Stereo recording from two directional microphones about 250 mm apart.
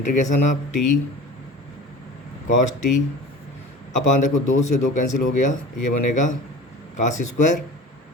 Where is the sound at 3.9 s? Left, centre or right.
Left.